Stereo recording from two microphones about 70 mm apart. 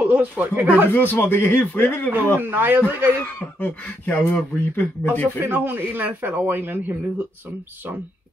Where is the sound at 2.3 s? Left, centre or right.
Right.